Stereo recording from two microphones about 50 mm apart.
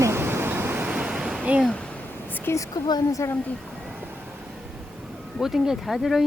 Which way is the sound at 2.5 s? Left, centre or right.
Left.